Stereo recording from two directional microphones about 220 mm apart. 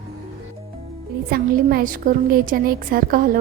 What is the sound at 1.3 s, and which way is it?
A woman's voice, 40° right (ahead or behind).